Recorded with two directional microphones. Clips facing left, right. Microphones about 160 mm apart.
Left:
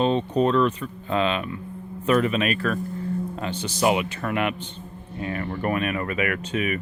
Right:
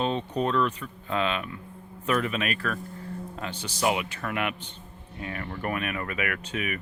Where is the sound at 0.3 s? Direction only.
30° left (ahead or behind).